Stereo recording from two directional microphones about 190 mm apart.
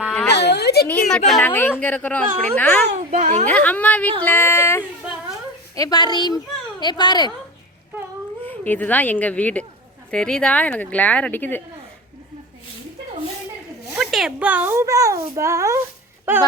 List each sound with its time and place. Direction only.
0.3 s a sound: 60° left (ahead or behind)
0.9 s speech: 10° left (ahead or behind)
2.9 s a child's voice: 40° right (ahead or behind)
3.4 s a child's voice: 10° left (ahead or behind)
8.4 s speech: 10° left (ahead or behind)
13.9 s a child's voice: centre (ahead or behind)